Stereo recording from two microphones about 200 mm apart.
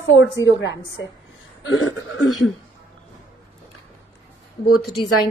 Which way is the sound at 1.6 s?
80° left.